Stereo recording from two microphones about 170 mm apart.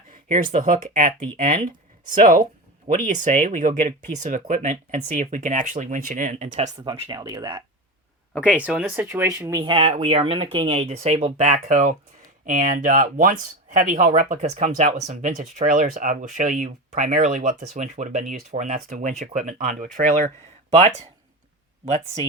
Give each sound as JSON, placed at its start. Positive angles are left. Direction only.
{"t": 0.1, "sound": "speech", "side_deg": -50}
{"t": 6.8, "sound": "speech", "side_deg": -30}
{"t": 8.4, "sound": "speech", "side_deg": -5}
{"t": 9.7, "sound": "speech", "side_deg": -35}
{"t": 21.8, "sound": "speech", "side_deg": -40}